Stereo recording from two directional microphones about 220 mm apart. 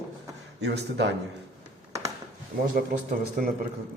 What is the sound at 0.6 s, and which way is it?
Speech, 50° right (ahead or behind).